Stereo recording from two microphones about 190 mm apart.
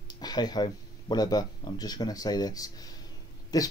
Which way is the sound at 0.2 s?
20° left (ahead or behind).